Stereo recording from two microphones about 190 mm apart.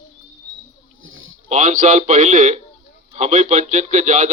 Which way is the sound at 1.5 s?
45° right (ahead or behind).